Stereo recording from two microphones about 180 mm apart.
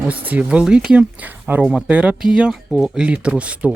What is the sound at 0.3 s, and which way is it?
Speech, 5° right (ahead or behind).